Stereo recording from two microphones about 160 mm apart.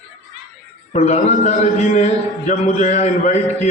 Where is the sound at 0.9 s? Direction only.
40° left (ahead or behind).